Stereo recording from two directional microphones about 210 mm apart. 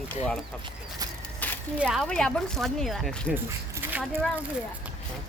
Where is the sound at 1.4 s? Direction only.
5° left (ahead or behind).